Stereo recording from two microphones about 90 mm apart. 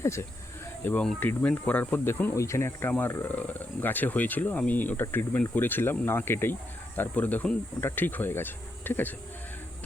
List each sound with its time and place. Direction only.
0.0 s speech: 30° left (ahead or behind)
2.3 s speech: 35° left (ahead or behind)
3.2 s speech: 20° left (ahead or behind)